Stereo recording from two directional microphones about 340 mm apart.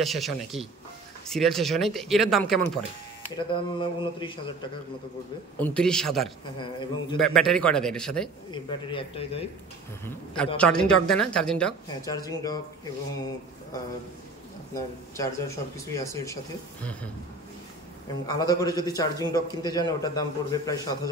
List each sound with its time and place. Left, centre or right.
0.0 s a woman's voice: centre
3.3 s a man's voice: centre
5.6 s a woman's voice: centre
6.6 s a man's voice: centre
7.2 s a woman's voice: centre
8.5 s a man's voice: centre
10.0 s a woman's voice: centre
14.7 s a man's voice: centre
18.2 s a man's voice: centre